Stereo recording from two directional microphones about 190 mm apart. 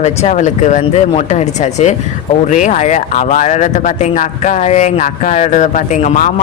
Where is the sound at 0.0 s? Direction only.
35° left (ahead or behind).